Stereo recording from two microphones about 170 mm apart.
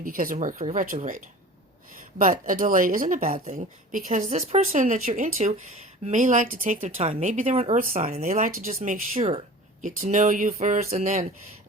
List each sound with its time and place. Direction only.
0.0 s speech: 55° right (ahead or behind)
2.5 s speech: 50° right (ahead or behind)
7.8 s speech: 55° right (ahead or behind)